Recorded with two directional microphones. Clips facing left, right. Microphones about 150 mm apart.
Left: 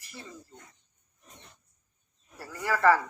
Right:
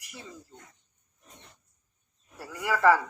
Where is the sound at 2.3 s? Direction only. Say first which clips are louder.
Right 1 dB; 5° right (ahead or behind).